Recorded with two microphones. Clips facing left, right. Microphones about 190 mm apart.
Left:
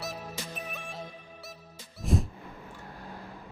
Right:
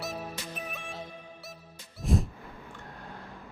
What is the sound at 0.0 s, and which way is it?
Music, centre (ahead or behind).